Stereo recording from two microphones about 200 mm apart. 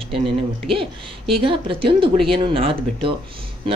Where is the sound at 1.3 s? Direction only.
25° right (ahead or behind).